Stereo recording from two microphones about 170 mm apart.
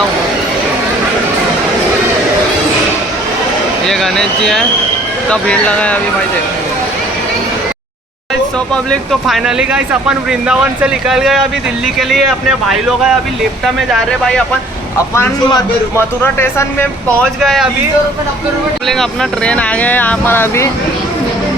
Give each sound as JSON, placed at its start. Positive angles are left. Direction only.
{"t": 3.8, "sound": "speech", "side_deg": 5}
{"t": 8.5, "sound": "speech", "side_deg": 5}
{"t": 15.1, "sound": "speech", "side_deg": 20}
{"t": 17.4, "sound": "speech", "side_deg": 0}
{"t": 18.9, "sound": "speech", "side_deg": 5}